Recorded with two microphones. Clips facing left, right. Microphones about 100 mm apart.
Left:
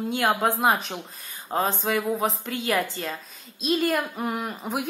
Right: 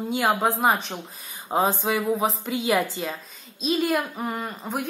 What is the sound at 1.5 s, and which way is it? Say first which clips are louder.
A woman's voice: right 2 dB; 15° right (ahead or behind).